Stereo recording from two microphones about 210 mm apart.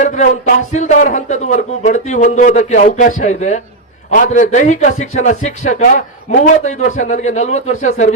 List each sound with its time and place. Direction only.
0.0 s a man's voice: 35° left (ahead or behind)